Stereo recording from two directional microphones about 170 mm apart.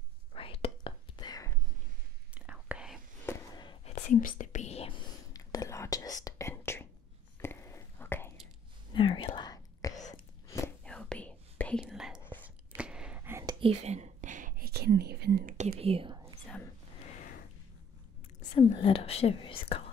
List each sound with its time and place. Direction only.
0.3 s whispering: 35° left (ahead or behind)
2.3 s whispering: 10° right (ahead or behind)
3.3 s a sound: 15° left (ahead or behind)
3.8 s whispering: 45° left (ahead or behind); by 8.3 s 15° left (ahead or behind)
8.9 s whispering: 30° left (ahead or behind)
10.8 s whispering: 5° left (ahead or behind)
11.8 s whispering: 5° right (ahead or behind)
13.6 s whispering: 35° right (ahead or behind); by 15.5 s 70° right (ahead or behind)
15.5 s whispering: 40° right (ahead or behind)
18.5 s whispering: 30° left (ahead or behind)